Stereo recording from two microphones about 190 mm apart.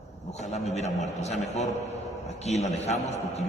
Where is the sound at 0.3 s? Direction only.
35° left (ahead or behind).